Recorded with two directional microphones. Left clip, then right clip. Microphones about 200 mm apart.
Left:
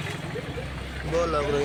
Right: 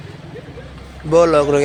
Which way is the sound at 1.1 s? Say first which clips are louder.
Right 13 dB; 40° right (ahead or behind).